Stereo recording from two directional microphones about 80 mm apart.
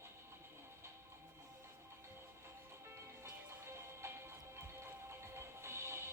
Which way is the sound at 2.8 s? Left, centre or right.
Right.